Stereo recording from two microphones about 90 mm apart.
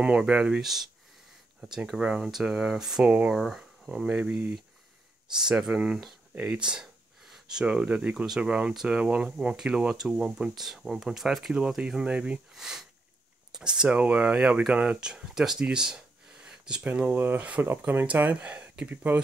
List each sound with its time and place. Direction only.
0.0 s speech: 10° right (ahead or behind)
3.3 s speech: centre (ahead or behind)